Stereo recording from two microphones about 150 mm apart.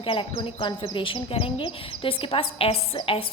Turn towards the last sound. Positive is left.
turn(degrees=35)  # may be behind; listen again after turning